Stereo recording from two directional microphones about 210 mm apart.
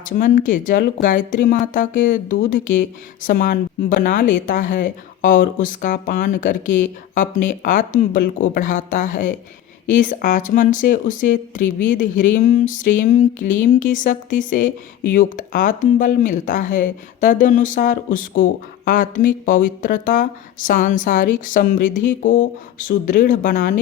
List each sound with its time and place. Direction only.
0.0 s speech: 40° left (ahead or behind)